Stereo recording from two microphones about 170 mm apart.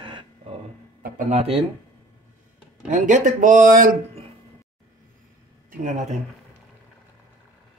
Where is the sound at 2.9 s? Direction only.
50° right (ahead or behind).